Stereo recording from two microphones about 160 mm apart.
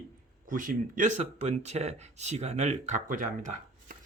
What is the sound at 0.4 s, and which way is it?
Speech, 60° right (ahead or behind).